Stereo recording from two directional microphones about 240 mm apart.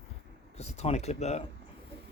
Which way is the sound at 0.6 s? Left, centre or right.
Left.